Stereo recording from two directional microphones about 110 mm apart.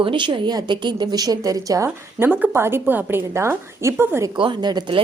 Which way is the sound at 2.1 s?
20° right (ahead or behind).